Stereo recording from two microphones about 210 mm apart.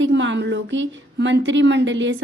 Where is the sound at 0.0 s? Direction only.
60° right (ahead or behind).